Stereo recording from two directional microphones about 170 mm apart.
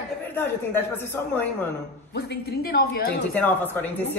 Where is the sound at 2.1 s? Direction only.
70° left (ahead or behind).